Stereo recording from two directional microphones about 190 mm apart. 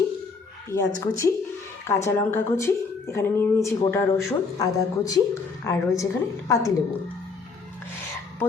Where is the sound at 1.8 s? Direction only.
15° left (ahead or behind).